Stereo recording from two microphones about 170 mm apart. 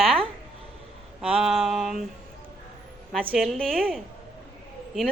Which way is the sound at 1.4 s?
Centre (ahead or behind).